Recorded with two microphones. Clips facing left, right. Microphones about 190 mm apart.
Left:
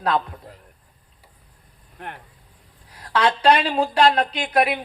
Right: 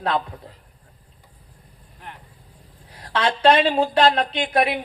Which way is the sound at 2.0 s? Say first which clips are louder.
Left 5 dB; 60° left (ahead or behind).